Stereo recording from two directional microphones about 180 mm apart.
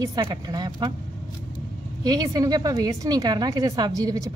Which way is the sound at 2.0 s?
20° right (ahead or behind).